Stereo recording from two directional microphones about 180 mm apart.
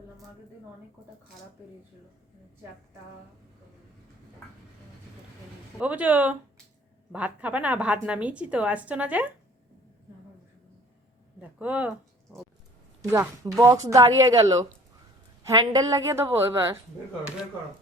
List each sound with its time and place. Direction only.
5.8 s a woman's voice: 10° right (ahead or behind)
11.3 s speech: 10° right (ahead or behind)
13.0 s a woman's voice: 15° right (ahead or behind)